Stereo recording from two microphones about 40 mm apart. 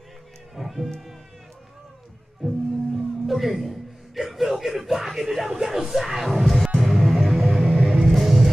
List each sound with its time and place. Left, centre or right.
0.6 s music: centre
2.4 s music: centre